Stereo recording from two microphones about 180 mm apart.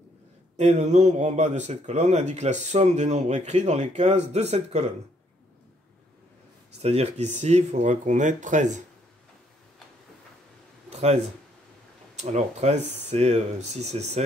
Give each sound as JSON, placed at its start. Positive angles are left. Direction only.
{"t": 0.6, "sound": "speech", "side_deg": -40}
{"t": 6.8, "sound": "speech", "side_deg": -35}
{"t": 10.9, "sound": "a sound", "side_deg": -40}
{"t": 12.2, "sound": "speech", "side_deg": -40}